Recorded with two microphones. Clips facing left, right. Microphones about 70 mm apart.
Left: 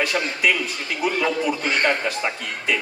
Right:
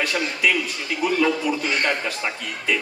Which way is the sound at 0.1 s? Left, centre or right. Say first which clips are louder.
Left 1 dB; left.